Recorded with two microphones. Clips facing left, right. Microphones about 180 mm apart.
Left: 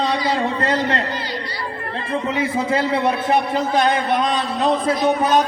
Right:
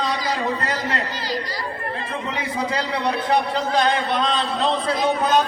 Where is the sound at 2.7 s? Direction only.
25° left (ahead or behind).